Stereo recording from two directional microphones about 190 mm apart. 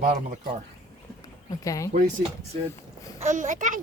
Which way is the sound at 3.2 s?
40° right (ahead or behind).